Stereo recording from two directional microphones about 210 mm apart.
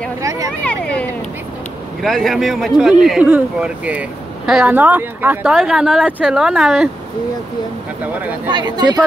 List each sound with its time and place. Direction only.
0.2 s a sound: 15° right (ahead or behind)
2.0 s speech: centre (ahead or behind)
8.5 s speech: 20° right (ahead or behind)